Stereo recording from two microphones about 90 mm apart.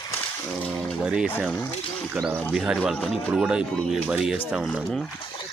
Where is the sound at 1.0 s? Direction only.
10° right (ahead or behind).